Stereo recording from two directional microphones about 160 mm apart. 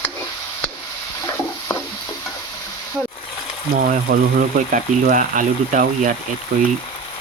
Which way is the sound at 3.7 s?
60° right (ahead or behind).